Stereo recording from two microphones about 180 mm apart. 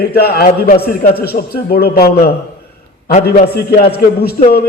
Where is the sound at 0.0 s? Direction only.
60° left (ahead or behind).